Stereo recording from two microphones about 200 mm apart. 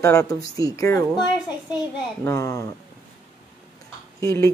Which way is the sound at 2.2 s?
15° left (ahead or behind).